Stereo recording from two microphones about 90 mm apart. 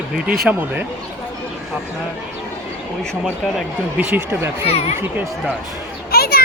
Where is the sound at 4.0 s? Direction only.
20° right (ahead or behind).